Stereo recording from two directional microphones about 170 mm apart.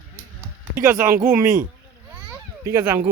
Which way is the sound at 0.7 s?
20° right (ahead or behind).